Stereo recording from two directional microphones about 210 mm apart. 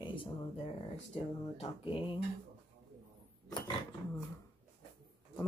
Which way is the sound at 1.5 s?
25° left (ahead or behind).